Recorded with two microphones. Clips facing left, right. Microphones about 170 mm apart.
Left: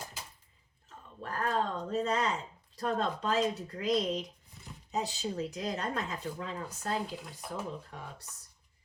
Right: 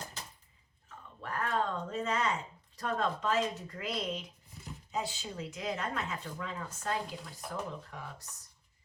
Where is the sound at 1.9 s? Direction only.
35° left (ahead or behind).